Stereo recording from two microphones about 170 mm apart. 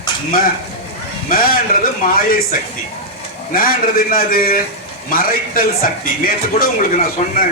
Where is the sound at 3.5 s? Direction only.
55° left (ahead or behind).